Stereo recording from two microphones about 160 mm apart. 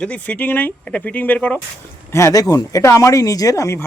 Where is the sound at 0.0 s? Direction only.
10° left (ahead or behind).